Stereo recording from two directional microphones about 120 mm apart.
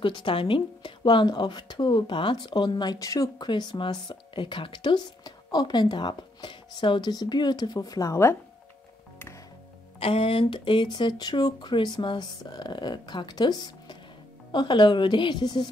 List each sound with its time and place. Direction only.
0.0 s a woman's voice: 45° left (ahead or behind); by 8.4 s 25° left (ahead or behind)
9.9 s a woman's voice: 55° left (ahead or behind); by 15.7 s 40° left (ahead or behind)